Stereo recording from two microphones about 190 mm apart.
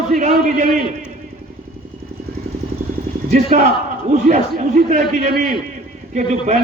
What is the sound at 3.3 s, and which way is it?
A man's voice, 40° right (ahead or behind).